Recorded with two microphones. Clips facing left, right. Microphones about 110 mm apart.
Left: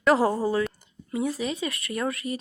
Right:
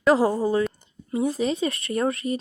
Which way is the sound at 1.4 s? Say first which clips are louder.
Right 5 dB; 30° right (ahead or behind).